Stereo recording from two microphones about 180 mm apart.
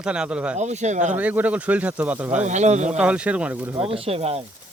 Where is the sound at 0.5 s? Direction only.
40° right (ahead or behind).